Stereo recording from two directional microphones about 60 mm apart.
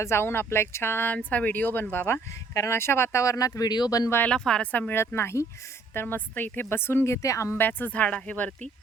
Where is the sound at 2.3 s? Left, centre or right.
Left.